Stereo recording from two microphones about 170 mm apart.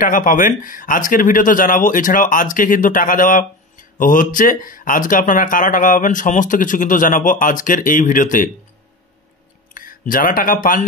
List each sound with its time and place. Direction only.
0.0 s speech: 50° left (ahead or behind)
9.8 s speech: 55° left (ahead or behind)